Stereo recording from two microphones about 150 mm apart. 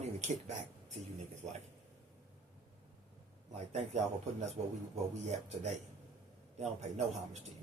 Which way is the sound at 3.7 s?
50° right (ahead or behind).